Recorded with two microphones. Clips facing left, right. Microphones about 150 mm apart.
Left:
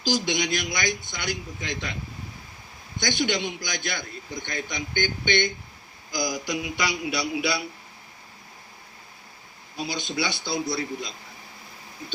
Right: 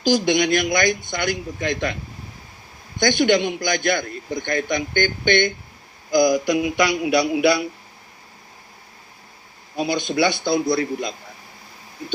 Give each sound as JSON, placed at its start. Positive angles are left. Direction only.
{"t": 0.0, "sound": "a man's voice", "side_deg": -55}
{"t": 3.0, "sound": "a man's voice", "side_deg": -55}
{"t": 9.7, "sound": "a man's voice", "side_deg": -55}